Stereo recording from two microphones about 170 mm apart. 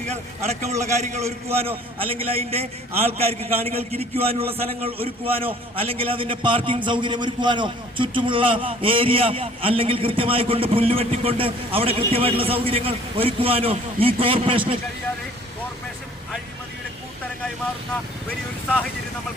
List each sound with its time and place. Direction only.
1.5 s a man's voice: 35° right (ahead or behind)